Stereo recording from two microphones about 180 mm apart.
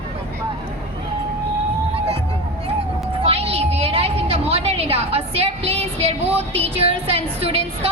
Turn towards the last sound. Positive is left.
turn(degrees=-35)  # may be behind; listen again after turning